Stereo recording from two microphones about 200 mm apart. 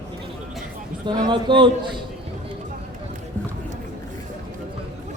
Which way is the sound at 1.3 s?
25° right (ahead or behind).